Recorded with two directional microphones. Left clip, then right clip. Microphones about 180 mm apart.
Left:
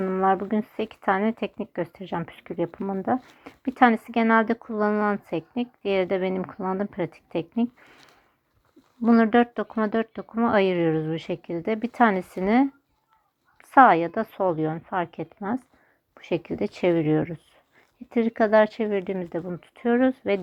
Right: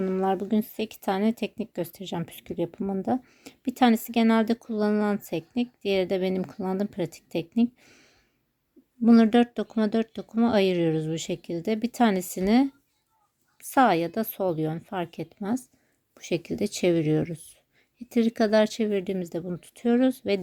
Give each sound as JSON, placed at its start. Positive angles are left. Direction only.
{"t": 0.0, "sound": "speech", "side_deg": -30}
{"t": 9.0, "sound": "speech", "side_deg": -35}
{"t": 13.7, "sound": "speech", "side_deg": -35}